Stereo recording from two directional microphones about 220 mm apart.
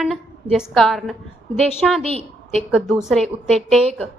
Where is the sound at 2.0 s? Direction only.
25° right (ahead or behind).